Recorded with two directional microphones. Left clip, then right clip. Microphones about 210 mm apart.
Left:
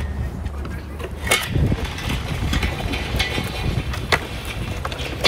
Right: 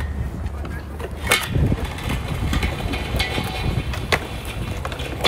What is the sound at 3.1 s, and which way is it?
Vehicle, 15° right (ahead or behind).